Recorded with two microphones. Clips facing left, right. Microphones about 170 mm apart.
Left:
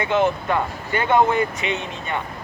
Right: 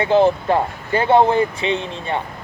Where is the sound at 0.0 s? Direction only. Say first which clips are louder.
Right 5 dB; 30° right (ahead or behind).